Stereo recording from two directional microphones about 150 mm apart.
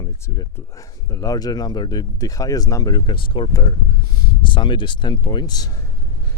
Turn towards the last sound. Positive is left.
turn(degrees=25)  # may be behind; listen again after turning